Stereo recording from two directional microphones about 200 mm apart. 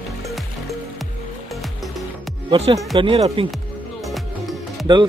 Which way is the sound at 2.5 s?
25° right (ahead or behind).